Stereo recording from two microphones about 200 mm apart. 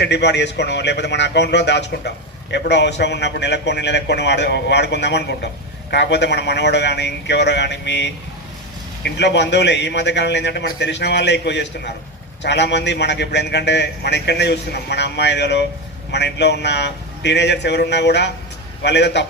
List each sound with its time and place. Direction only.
0.0 s a man's voice: 60° left (ahead or behind)